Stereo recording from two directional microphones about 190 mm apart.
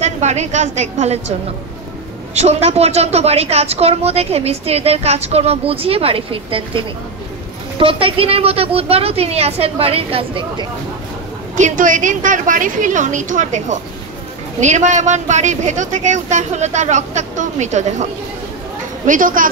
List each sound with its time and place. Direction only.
0.0 s a woman's voice: 35° right (ahead or behind)
2.3 s a woman's voice: 35° right (ahead or behind)
11.5 s a woman's voice: 40° right (ahead or behind)
19.0 s a woman's voice: 45° right (ahead or behind)